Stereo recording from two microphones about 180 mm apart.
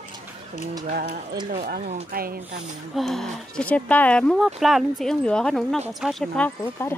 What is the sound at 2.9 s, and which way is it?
Speech, centre (ahead or behind).